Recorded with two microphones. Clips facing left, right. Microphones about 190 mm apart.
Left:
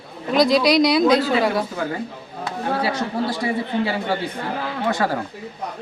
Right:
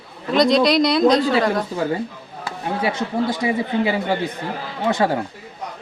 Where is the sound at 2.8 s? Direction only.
20° right (ahead or behind).